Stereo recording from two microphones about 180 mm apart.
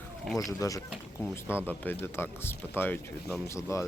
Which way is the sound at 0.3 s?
20° left (ahead or behind).